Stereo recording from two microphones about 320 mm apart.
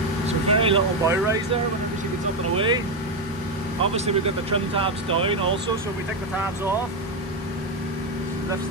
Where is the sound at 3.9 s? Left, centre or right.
Centre.